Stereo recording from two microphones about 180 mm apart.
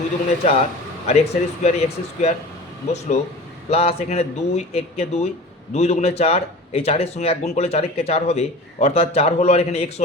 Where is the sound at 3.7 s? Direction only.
35° left (ahead or behind).